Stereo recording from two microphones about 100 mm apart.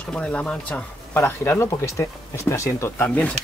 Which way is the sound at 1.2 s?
25° left (ahead or behind).